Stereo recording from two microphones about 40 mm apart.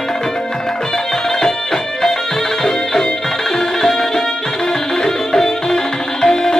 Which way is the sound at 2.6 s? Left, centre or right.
Centre.